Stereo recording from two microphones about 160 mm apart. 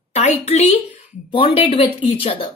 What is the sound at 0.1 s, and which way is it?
A woman's voice, 40° left (ahead or behind).